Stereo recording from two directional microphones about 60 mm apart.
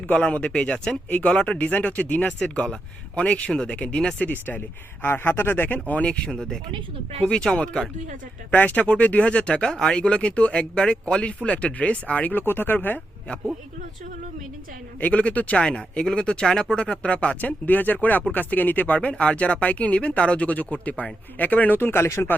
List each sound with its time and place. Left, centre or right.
0.1 s speech: left
2.4 s speech: centre
4.3 s speech: left
5.9 s speech: left
8.5 s speech: left
15.0 s speech: left
15.6 s speech: centre; by 22.3 s left